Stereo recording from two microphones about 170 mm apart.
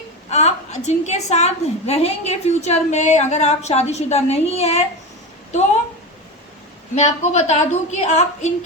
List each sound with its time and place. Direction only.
0.3 s a woman's voice: 40° left (ahead or behind)
7.0 s a woman's voice: 40° left (ahead or behind)